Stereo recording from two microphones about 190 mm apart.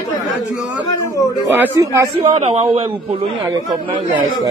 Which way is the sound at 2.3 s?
30° right (ahead or behind).